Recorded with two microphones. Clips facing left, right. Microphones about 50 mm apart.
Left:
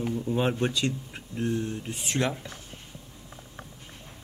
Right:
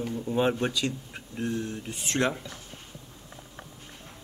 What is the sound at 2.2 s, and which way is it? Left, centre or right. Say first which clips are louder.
Speech: right 2 dB; right.